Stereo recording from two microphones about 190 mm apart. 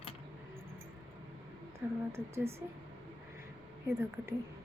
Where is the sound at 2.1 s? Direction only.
15° right (ahead or behind).